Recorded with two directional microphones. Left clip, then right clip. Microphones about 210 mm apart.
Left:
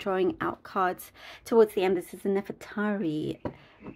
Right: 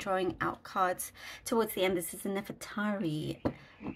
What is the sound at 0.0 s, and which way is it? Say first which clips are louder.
Speech: left 4 dB; 40° left (ahead or behind).